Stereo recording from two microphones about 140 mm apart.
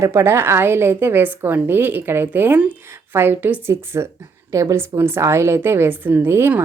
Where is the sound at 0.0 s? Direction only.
20° right (ahead or behind).